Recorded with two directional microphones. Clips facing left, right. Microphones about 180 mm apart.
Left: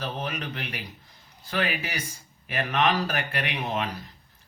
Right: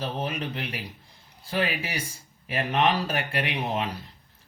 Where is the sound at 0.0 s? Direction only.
30° right (ahead or behind).